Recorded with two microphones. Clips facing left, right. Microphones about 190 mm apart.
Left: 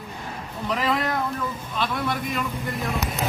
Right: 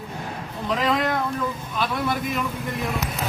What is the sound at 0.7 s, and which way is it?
Speech, centre (ahead or behind).